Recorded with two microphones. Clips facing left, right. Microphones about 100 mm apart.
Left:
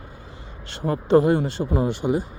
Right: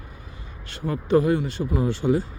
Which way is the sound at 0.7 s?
30° left (ahead or behind).